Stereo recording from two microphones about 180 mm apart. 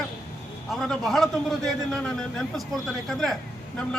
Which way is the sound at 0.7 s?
Centre (ahead or behind).